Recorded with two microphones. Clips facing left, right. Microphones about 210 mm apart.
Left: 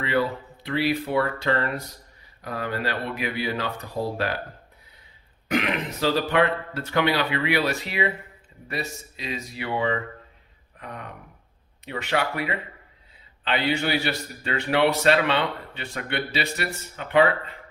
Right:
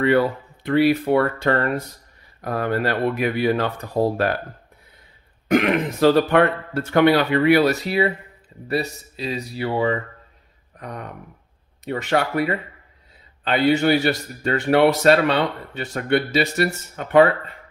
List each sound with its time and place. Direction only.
0.7 s a man's voice: 50° right (ahead or behind)
5.5 s a man's voice: 50° right (ahead or behind)